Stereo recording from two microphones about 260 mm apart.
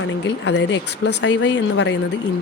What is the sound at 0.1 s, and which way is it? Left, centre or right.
Speech, left.